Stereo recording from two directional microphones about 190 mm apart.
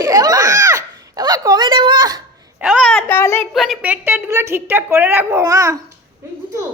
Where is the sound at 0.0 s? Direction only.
20° right (ahead or behind).